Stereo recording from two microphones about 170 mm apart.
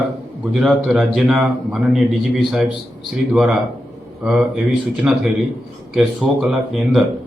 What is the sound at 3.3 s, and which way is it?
Speech, 5° right (ahead or behind).